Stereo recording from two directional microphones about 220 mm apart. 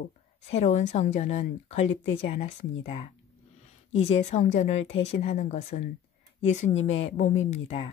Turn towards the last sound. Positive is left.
turn(degrees=25)  # may be behind; listen again after turning